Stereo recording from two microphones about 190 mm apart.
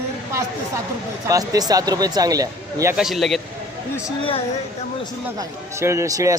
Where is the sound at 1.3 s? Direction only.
20° right (ahead or behind).